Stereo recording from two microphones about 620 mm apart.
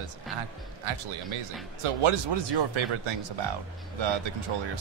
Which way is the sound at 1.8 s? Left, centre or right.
Right.